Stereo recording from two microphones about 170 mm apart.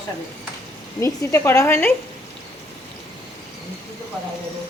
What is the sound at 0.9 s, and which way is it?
Speech, 15° left (ahead or behind).